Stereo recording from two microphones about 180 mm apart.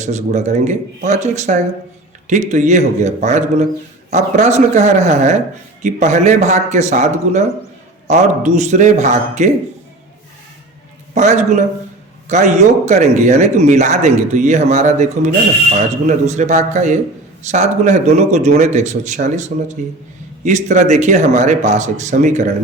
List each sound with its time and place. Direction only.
0.0 s speech: 40° right (ahead or behind)
11.1 s a man's voice: 40° right (ahead or behind)